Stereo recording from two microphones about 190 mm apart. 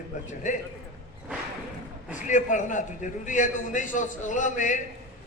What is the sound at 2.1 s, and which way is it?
A man's voice, 40° left (ahead or behind).